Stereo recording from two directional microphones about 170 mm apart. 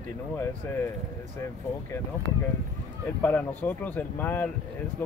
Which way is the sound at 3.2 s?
10° left (ahead or behind).